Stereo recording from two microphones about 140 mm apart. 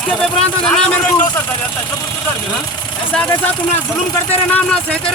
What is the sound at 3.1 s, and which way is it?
Speech, 10° left (ahead or behind).